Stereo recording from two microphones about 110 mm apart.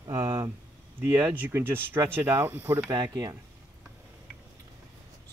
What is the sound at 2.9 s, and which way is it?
Speech, 35° right (ahead or behind).